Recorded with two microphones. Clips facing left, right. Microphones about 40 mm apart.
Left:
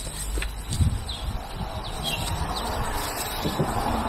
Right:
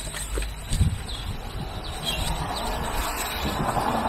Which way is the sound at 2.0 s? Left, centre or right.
Right.